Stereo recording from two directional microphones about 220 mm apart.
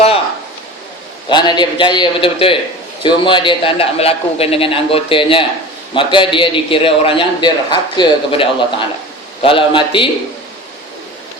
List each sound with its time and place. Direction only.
1.3 s a man's voice: 20° left (ahead or behind)